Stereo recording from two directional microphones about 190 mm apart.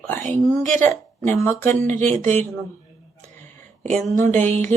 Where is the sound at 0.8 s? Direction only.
10° left (ahead or behind).